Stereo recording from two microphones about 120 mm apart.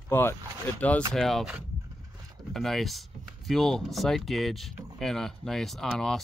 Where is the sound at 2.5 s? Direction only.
Centre (ahead or behind).